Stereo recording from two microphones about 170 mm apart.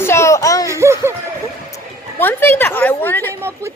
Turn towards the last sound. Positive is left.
turn(degrees=10)  # may be behind; listen again after turning